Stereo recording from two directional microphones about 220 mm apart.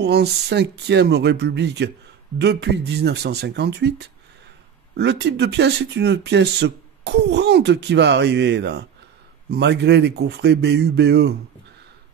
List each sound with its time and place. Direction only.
0.0 s speech: 50° right (ahead or behind)